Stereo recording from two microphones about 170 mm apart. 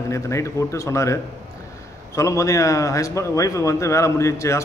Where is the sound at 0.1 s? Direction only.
15° left (ahead or behind).